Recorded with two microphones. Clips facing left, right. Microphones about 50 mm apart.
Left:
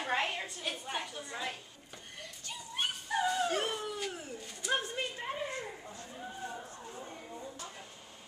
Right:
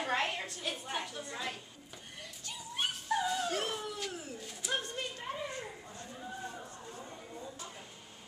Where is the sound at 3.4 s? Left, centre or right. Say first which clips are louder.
Left 2 dB; centre.